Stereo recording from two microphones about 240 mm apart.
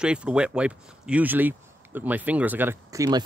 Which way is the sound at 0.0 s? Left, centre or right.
Centre.